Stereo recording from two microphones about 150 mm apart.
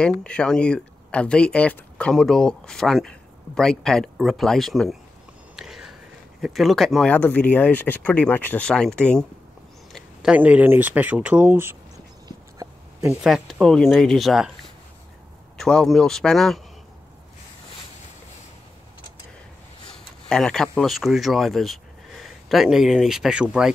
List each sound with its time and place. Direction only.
0.0 s speech: 5° left (ahead or behind)
5.6 s a sound: 5° right (ahead or behind)
6.4 s speech: centre (ahead or behind)
9.9 s speech: 5° right (ahead or behind)
12.3 s a sound: 20° right (ahead or behind)
13.2 s speech: centre (ahead or behind)
20.2 s speech: 5° left (ahead or behind)